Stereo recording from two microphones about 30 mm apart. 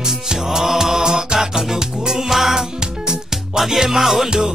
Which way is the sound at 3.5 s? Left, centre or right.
Centre.